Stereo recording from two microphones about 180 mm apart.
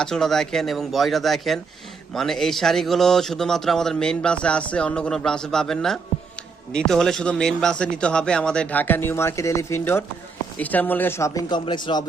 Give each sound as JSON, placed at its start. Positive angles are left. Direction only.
{"t": 0.0, "sound": "a man's voice", "side_deg": 5}
{"t": 11.4, "sound": "speech", "side_deg": 25}